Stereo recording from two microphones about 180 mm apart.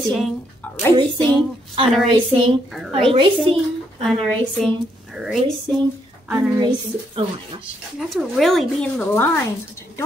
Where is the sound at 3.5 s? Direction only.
5° left (ahead or behind).